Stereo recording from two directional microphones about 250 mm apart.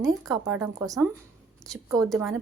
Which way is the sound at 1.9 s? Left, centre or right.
Centre.